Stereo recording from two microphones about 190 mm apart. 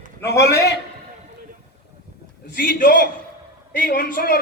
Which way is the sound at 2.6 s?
45° left (ahead or behind).